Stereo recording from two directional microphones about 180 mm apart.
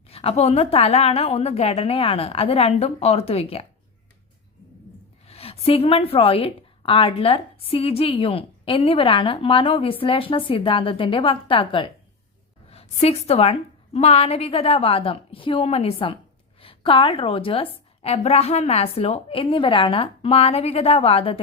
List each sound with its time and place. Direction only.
0.1 s a woman's voice: 35° left (ahead or behind)
5.2 s a woman's voice: 35° left (ahead or behind)